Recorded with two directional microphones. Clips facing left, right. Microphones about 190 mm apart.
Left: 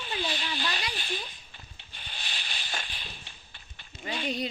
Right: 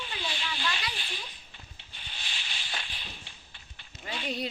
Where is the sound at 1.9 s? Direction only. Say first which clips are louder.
Left 2 dB; 50° left (ahead or behind).